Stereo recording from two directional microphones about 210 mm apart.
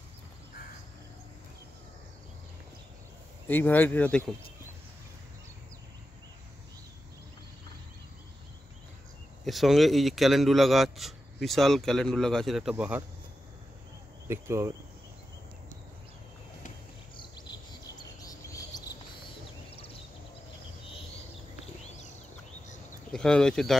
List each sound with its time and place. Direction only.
3.4 s speech: 10° left (ahead or behind)
9.4 s speech: centre (ahead or behind)
14.2 s speech: 10° right (ahead or behind)
17.2 s chirp: 20° left (ahead or behind)
23.1 s speech: 5° left (ahead or behind)